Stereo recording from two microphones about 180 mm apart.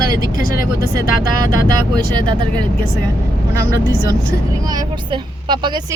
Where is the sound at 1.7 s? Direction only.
25° right (ahead or behind).